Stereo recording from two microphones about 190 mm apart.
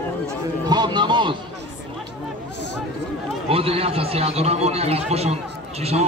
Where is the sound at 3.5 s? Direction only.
30° right (ahead or behind).